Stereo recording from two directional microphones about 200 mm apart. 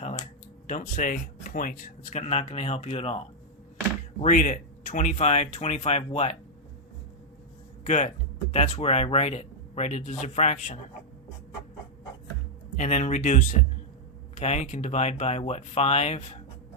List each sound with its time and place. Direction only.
0.0 s a sound: 35° left (ahead or behind)
0.7 s speech: 45° left (ahead or behind)
4.2 s speech: 40° left (ahead or behind)
7.9 s speech: 35° left (ahead or behind)
12.7 s speech: 40° left (ahead or behind)